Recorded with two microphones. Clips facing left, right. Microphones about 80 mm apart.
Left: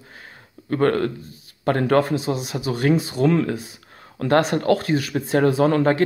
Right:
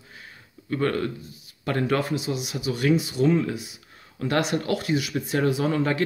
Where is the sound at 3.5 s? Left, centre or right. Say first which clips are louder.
Left 4 dB; left.